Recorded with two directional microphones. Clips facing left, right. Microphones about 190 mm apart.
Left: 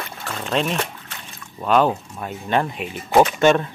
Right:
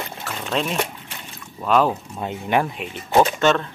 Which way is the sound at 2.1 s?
20° right (ahead or behind).